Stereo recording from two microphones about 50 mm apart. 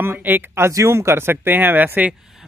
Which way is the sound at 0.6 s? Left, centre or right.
Right.